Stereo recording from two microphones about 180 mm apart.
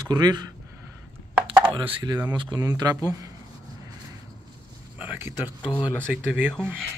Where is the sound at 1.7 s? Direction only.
25° right (ahead or behind).